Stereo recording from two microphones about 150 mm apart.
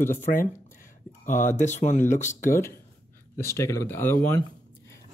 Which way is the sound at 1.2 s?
55° left (ahead or behind).